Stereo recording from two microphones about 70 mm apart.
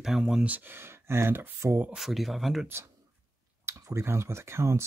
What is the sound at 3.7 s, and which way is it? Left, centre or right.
Speech, right.